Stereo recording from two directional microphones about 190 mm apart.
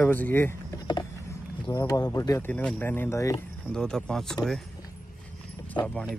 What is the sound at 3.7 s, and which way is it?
Speech, 5° left (ahead or behind).